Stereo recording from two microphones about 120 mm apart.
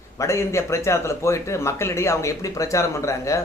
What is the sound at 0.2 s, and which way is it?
Speech, 25° left (ahead or behind).